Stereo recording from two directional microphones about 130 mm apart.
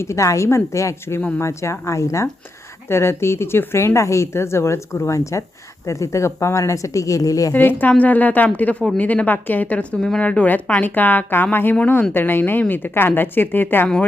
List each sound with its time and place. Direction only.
0.0 s speech: 20° left (ahead or behind)
7.5 s a woman's voice: 15° left (ahead or behind)